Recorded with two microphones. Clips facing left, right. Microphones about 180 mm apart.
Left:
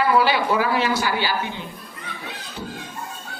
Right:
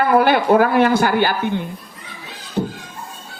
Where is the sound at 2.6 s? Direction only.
45° right (ahead or behind).